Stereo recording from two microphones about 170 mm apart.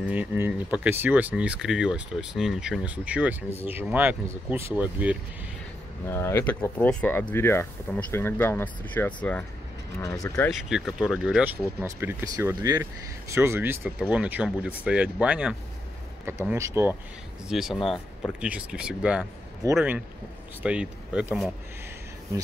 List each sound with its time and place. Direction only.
0.1 s speech: 10° right (ahead or behind)
6.0 s speech: 15° left (ahead or behind)
9.9 s speech: 20° left (ahead or behind)
10.5 s speech: 5° right (ahead or behind)
17.5 s speech: centre (ahead or behind)